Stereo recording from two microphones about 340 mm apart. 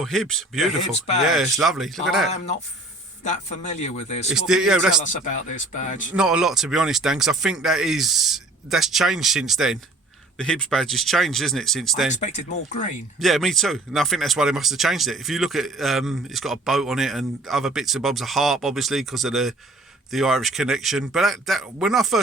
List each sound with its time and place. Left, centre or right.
0.0 s speech: centre
3.2 s speech: left
4.3 s speech: centre
5.7 s speech: left
6.1 s speech: centre
12.2 s speech: left
13.1 s speech: centre